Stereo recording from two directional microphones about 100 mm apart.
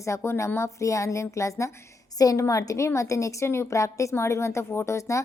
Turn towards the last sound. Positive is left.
turn(degrees=30)  # may be behind; listen again after turning